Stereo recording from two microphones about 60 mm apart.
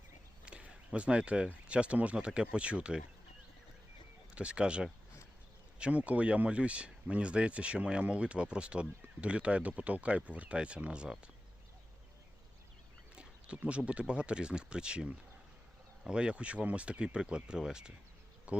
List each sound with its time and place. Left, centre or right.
0.4 s speech: centre
4.4 s speech: centre
13.1 s a sound: centre
14.1 s speech: centre